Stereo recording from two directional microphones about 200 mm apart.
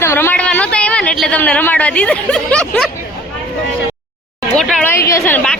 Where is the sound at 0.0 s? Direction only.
10° left (ahead or behind).